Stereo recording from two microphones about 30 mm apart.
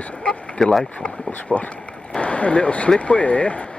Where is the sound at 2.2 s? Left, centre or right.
Left.